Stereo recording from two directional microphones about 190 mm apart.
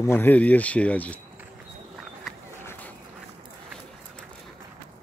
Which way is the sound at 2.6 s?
10° left (ahead or behind).